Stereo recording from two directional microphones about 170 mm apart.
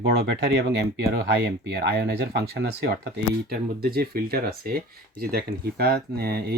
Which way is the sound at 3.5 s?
65° right (ahead or behind).